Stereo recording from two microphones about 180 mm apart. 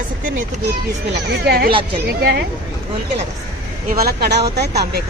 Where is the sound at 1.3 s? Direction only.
60° right (ahead or behind).